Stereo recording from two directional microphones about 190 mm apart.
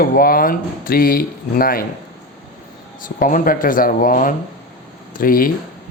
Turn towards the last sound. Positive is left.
turn(degrees=50)  # may be behind; listen again after turning